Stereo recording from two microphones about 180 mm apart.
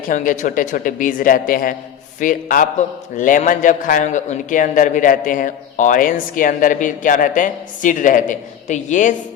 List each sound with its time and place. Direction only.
0.1 s a man's voice: 45° left (ahead or behind)